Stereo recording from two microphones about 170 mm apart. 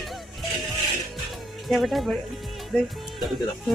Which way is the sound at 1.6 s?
Centre (ahead or behind).